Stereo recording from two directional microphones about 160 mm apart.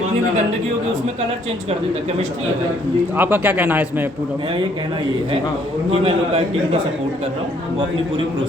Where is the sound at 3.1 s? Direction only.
10° right (ahead or behind).